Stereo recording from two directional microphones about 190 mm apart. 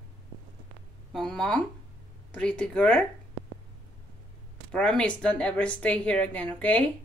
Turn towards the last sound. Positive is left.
turn(degrees=5)  # may be behind; listen again after turning